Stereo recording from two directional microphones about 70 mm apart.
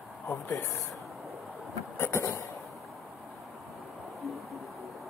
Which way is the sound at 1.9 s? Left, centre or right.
Left.